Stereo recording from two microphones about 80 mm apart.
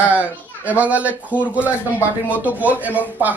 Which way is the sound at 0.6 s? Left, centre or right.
Centre.